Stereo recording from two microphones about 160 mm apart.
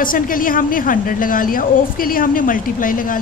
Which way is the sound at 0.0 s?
60° left (ahead or behind).